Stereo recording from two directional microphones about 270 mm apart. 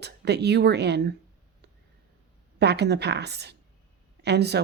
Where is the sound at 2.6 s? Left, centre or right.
Right.